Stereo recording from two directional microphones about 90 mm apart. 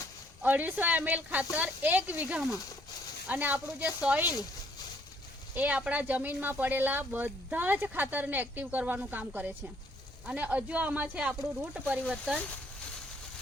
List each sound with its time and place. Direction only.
0.4 s speech: 20° right (ahead or behind)
5.5 s speech: 15° right (ahead or behind)